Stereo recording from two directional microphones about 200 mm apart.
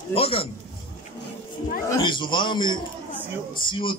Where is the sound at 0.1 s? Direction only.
30° left (ahead or behind).